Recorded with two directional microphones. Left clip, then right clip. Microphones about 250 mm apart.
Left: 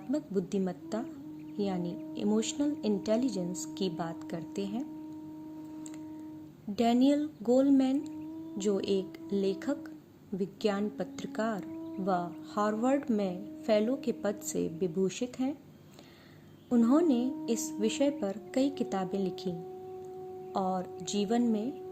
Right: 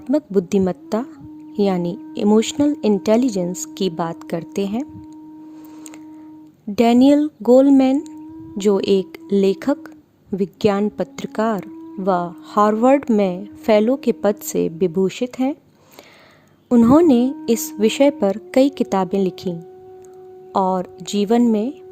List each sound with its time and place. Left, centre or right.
0.1 s a woman's voice: right
6.7 s a woman's voice: right
16.6 s a woman's voice: right